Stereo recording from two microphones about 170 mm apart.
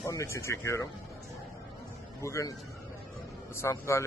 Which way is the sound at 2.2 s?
20° left (ahead or behind).